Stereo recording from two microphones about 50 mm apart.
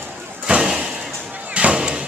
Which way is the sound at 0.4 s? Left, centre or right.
Centre.